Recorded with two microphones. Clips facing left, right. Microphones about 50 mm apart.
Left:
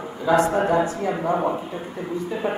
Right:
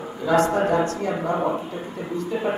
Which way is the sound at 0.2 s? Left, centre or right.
Centre.